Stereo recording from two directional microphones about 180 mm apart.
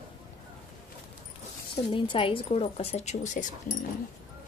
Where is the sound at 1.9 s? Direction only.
30° left (ahead or behind).